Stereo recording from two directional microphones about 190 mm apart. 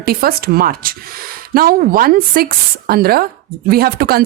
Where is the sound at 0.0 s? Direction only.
55° right (ahead or behind).